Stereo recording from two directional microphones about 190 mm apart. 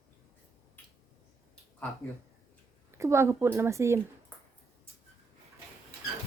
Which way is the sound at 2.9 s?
15° right (ahead or behind).